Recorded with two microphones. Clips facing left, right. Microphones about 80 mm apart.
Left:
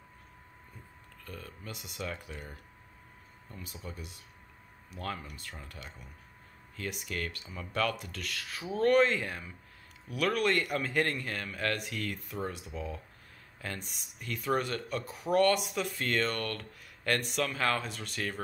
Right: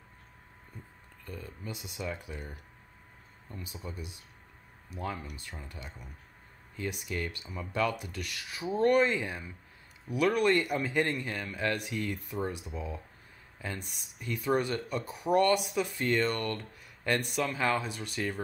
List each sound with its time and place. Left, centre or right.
1.2 s speech: centre
1.7 s speech: centre
2.0 s speech: centre
3.7 s speech: centre
13.7 s speech: centre